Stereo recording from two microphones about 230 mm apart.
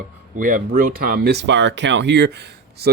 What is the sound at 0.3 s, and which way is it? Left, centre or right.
Speech, right.